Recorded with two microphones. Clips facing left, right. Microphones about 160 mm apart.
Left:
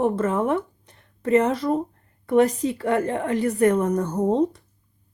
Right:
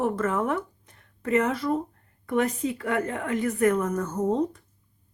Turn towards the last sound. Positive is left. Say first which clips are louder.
# left 4 dB
turn(degrees=35)  # may be behind; listen again after turning